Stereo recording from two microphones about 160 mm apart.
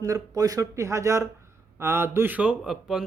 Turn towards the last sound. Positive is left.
turn(degrees=-5)  # may be behind; listen again after turning